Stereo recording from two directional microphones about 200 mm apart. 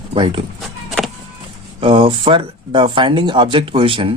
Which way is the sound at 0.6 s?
Centre (ahead or behind).